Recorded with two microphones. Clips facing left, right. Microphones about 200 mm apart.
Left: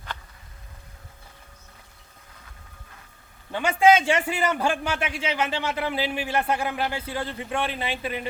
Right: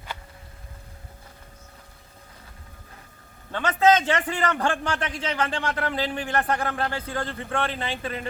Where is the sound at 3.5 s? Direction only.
10° left (ahead or behind).